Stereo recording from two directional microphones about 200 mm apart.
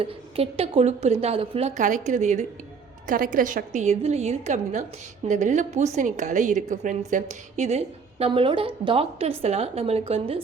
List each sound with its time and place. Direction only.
0.0 s a woman's voice: 30° right (ahead or behind)